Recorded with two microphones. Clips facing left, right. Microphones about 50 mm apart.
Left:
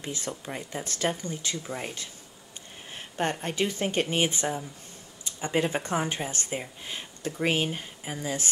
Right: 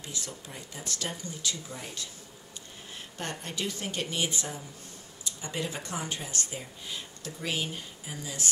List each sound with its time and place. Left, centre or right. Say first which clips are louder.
0.0 s speech: left 6 dB; left